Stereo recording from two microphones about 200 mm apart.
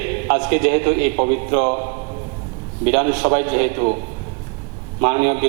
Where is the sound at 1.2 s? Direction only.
30° right (ahead or behind).